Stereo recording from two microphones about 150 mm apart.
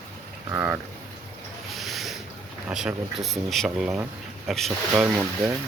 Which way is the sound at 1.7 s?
Centre (ahead or behind).